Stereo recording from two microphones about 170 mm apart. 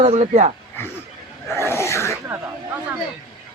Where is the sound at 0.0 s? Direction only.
45° right (ahead or behind).